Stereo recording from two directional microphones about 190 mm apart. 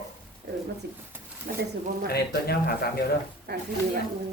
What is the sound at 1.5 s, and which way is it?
Speech, 50° right (ahead or behind).